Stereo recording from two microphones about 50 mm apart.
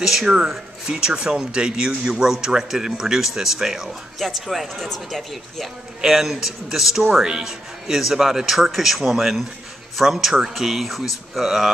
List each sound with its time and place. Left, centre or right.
0.0 s speech: centre
0.8 s speech: centre
5.9 s speech: centre